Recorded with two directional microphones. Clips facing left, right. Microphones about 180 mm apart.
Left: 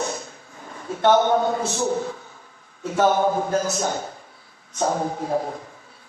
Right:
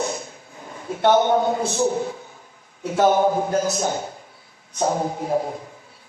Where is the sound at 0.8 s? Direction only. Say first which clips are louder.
Even; 15° right (ahead or behind).